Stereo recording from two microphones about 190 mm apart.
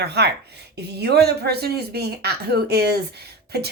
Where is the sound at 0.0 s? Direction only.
60° right (ahead or behind).